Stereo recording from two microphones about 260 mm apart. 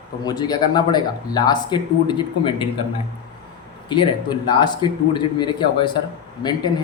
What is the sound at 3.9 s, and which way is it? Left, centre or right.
Speech, centre.